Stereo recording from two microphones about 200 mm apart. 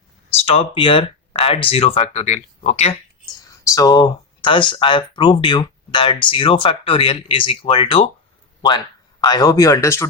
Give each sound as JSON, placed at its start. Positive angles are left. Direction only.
{"t": 0.4, "sound": "speech", "side_deg": 25}
{"t": 3.5, "sound": "speech", "side_deg": 15}
{"t": 9.2, "sound": "speech", "side_deg": 20}